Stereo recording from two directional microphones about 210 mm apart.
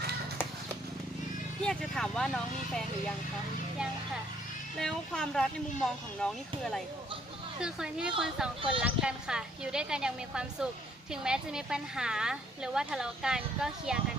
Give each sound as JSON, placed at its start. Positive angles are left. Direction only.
{"t": 1.6, "sound": "a woman's voice", "side_deg": 5}
{"t": 4.8, "sound": "a woman's voice", "side_deg": 5}